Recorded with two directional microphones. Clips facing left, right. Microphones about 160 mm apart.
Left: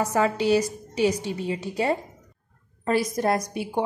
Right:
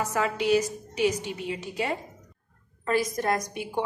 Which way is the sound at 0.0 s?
35° left (ahead or behind).